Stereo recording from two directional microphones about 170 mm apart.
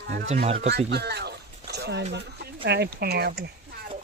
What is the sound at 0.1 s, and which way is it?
Speech, 65° right (ahead or behind).